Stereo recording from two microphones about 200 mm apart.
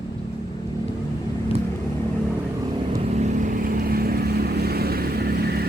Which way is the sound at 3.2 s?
35° right (ahead or behind).